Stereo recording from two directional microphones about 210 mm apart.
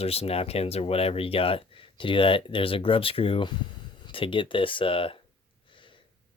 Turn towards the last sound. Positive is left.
turn(degrees=25)  # may be behind; listen again after turning